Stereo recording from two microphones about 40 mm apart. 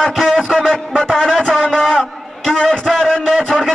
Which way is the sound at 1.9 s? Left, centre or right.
Centre.